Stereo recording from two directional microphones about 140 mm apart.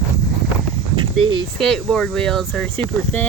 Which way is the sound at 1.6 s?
5° left (ahead or behind).